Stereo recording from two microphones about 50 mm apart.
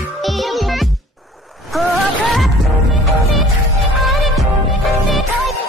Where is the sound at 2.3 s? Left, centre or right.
Centre.